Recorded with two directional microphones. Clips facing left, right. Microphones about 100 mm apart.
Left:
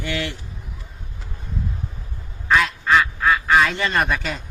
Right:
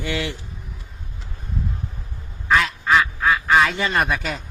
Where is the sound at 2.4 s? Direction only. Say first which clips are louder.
Even; centre (ahead or behind).